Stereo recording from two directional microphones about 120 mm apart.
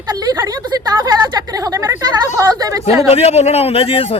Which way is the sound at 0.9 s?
35° right (ahead or behind).